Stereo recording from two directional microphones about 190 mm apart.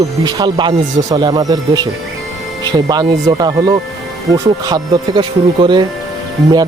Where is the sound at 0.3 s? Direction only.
20° right (ahead or behind).